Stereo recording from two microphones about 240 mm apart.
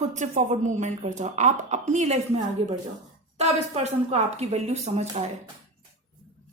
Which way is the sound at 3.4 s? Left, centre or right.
Right.